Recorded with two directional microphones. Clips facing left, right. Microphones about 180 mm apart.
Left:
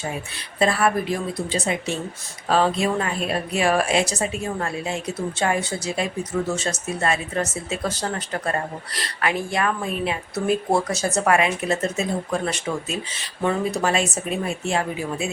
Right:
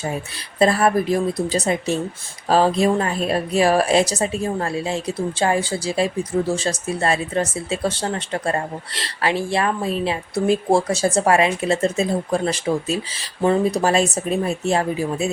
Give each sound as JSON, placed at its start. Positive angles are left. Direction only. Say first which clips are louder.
{"t": 0.6, "sound": "a woman's voice", "louder": "right 4 dB", "side_deg": -40}